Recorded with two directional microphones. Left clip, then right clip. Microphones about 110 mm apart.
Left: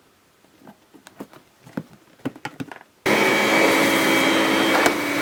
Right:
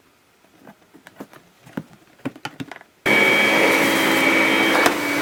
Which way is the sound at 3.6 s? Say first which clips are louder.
Right 1 dB; 5° right (ahead or behind).